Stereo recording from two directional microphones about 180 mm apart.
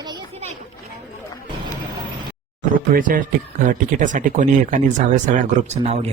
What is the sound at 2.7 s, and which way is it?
Speech, 50° right (ahead or behind).